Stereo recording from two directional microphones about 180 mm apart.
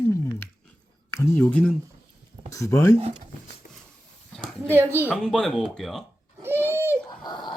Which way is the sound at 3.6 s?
50° left (ahead or behind).